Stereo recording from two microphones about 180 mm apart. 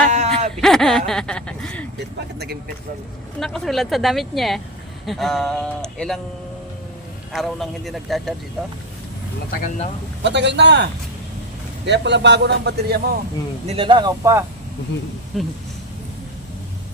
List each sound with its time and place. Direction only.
0.1 s a sound: 40° right (ahead or behind)
0.6 s speech: centre (ahead or behind)
2.0 s speech: 65° right (ahead or behind)
3.4 s speech: centre (ahead or behind)
7.3 s speech: centre (ahead or behind)
9.6 s speech: 40° left (ahead or behind)
10.2 s a man's voice: 75° right (ahead or behind)
11.9 s a man's voice: 75° right (ahead or behind)
13.7 s speech: 30° right (ahead or behind)
15.3 s speech: centre (ahead or behind)